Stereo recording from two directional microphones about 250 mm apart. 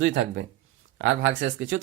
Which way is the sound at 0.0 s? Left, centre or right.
Right.